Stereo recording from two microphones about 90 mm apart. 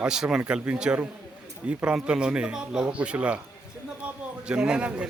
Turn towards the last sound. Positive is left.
turn(degrees=-10)  # may be behind; listen again after turning